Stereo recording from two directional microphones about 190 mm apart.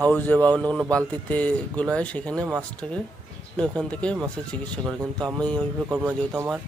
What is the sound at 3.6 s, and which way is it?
Speech, 5° left (ahead or behind).